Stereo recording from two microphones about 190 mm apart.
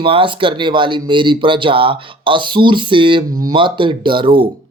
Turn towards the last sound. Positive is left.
turn(degrees=-25)  # may be behind; listen again after turning